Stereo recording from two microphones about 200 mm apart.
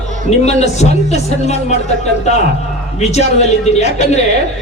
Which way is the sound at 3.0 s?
35° left (ahead or behind).